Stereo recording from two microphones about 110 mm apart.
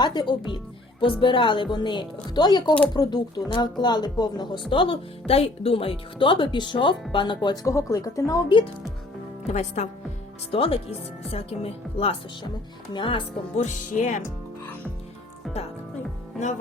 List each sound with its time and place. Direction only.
0.0 s speech: 45° left (ahead or behind)
4.7 s speech: 50° left (ahead or behind)
7.6 s speech: 30° left (ahead or behind)
8.4 s speech: 50° left (ahead or behind)
9.5 s speech: 90° left
10.5 s speech: 55° left (ahead or behind)
12.9 s speech: 50° left (ahead or behind)
13.7 s speech: 90° left
15.4 s music: centre (ahead or behind)